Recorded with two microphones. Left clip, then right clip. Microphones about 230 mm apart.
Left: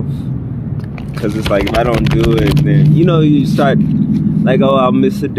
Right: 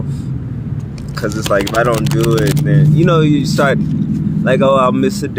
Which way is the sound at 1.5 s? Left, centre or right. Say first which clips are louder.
Even; centre.